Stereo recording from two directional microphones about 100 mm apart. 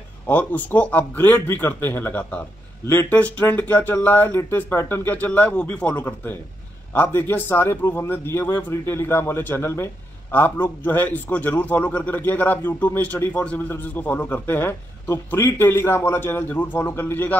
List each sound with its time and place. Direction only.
0.3 s a man's voice: 15° left (ahead or behind)